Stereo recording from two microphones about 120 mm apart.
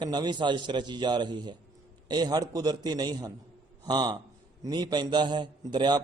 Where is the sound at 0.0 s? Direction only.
35° right (ahead or behind).